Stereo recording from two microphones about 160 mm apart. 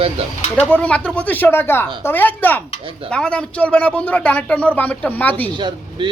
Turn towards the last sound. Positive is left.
turn(degrees=-30)  # may be behind; listen again after turning